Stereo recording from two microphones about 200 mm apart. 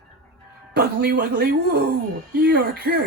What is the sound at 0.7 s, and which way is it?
Speech, 50° right (ahead or behind).